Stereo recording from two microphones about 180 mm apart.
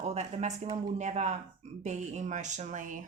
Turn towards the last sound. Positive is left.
turn(degrees=-45)  # may be behind; listen again after turning